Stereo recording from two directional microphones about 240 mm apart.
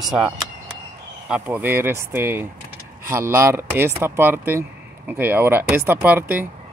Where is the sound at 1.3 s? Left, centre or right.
Centre.